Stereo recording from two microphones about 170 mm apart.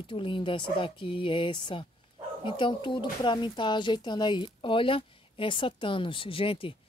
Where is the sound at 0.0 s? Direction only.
30° left (ahead or behind).